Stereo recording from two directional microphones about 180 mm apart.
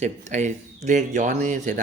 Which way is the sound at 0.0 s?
40° right (ahead or behind).